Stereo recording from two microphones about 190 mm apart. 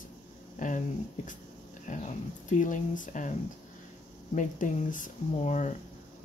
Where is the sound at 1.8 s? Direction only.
40° left (ahead or behind).